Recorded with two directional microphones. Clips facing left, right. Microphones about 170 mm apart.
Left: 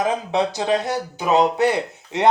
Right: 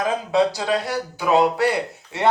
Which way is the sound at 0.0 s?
20° left (ahead or behind).